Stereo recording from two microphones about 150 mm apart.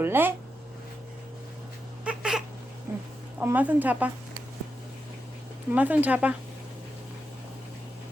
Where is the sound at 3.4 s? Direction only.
10° right (ahead or behind).